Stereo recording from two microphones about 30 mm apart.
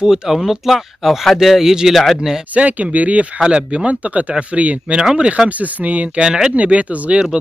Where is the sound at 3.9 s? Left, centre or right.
Right.